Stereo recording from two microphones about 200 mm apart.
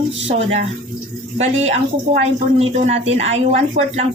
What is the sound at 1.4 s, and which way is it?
A woman's voice, 35° right (ahead or behind).